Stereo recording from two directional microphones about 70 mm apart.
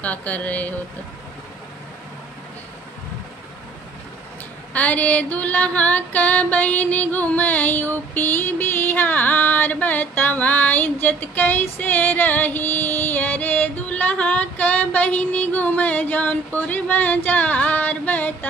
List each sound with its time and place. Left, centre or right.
0.0 s female singing: left
4.7 s female singing: left